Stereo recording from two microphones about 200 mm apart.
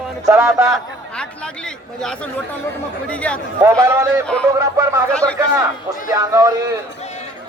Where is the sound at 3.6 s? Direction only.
15° right (ahead or behind).